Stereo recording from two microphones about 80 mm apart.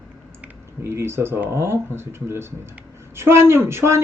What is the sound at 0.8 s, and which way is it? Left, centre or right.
Speech, right.